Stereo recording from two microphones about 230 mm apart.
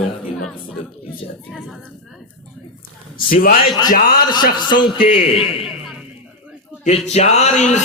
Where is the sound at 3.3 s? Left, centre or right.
Left.